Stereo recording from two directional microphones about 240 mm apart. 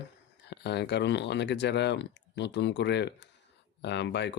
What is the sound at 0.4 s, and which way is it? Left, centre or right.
Speech, left.